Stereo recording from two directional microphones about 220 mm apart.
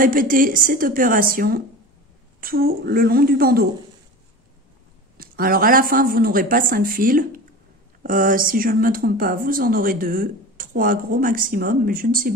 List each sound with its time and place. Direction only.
0.0 s a woman's voice: 40° right (ahead or behind)
5.1 s speech: 40° right (ahead or behind)